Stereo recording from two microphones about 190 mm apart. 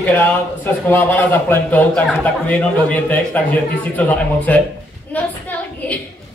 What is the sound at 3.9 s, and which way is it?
Speech, 10° left (ahead or behind).